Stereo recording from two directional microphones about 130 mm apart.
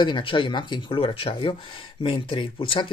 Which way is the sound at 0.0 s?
40° left (ahead or behind).